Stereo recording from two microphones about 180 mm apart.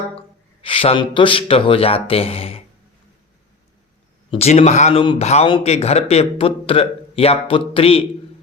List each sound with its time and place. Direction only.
0.2 s speech: 30° left (ahead or behind)
4.3 s speech: 35° left (ahead or behind)